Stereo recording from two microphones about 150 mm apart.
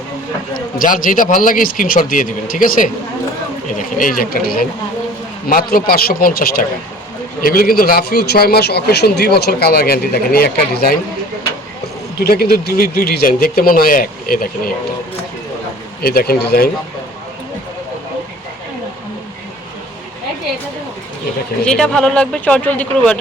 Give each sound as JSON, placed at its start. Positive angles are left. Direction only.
{"t": 0.5, "sound": "a man's voice", "side_deg": 65}
{"t": 7.4, "sound": "a man's voice", "side_deg": 75}
{"t": 12.2, "sound": "speech", "side_deg": 90}
{"t": 16.0, "sound": "a man's voice", "side_deg": 90}
{"t": 21.7, "sound": "speech", "side_deg": 5}